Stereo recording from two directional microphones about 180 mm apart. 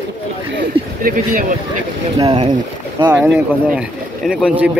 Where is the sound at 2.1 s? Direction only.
25° right (ahead or behind).